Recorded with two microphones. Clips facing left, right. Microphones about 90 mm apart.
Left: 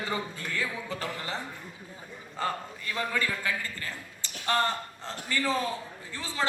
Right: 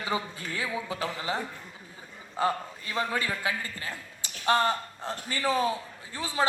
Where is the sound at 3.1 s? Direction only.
15° right (ahead or behind).